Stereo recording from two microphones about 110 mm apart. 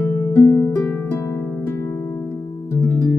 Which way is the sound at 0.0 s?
15° left (ahead or behind).